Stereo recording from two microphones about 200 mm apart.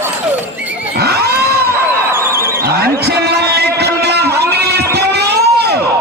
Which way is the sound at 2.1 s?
10° right (ahead or behind).